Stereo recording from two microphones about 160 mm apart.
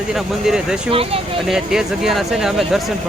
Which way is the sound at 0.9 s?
35° right (ahead or behind).